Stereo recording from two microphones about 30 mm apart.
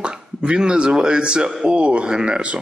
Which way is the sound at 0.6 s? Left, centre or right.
Right.